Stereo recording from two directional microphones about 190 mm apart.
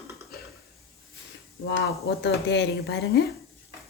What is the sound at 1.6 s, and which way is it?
Speech, 60° left (ahead or behind).